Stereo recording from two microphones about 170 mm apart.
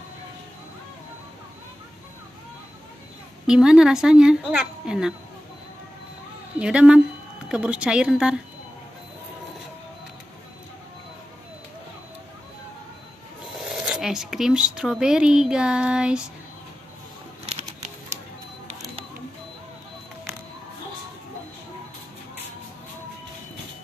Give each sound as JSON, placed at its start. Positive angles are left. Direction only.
{"t": 3.4, "sound": "a woman's voice", "side_deg": -5}
{"t": 6.6, "sound": "a woman's voice", "side_deg": -5}
{"t": 13.6, "sound": "speech", "side_deg": 0}
{"t": 17.5, "sound": "a sound", "side_deg": -40}